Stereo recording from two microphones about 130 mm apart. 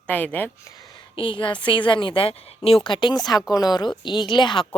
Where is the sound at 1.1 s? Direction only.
40° left (ahead or behind).